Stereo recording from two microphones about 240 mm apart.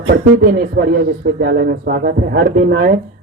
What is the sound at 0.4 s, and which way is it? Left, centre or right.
A man's voice, right.